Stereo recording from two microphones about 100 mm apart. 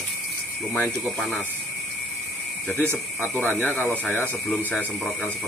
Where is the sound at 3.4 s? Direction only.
15° left (ahead or behind).